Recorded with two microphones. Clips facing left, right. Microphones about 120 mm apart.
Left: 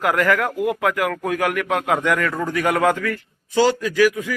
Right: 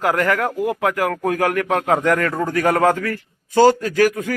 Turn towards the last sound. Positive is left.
turn(degrees=-50)  # may be behind; listen again after turning